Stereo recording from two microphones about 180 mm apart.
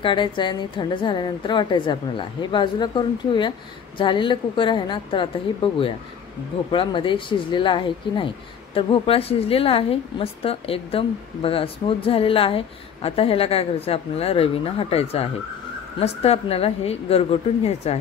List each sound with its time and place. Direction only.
0.0 s a woman's voice: 25° left (ahead or behind)